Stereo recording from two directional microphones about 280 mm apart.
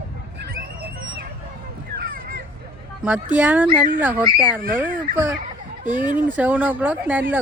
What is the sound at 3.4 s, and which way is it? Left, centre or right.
Speech, centre.